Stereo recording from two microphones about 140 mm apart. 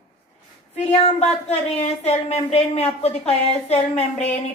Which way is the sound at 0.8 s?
45° left (ahead or behind).